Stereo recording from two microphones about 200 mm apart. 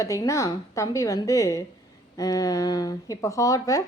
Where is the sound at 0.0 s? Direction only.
15° left (ahead or behind).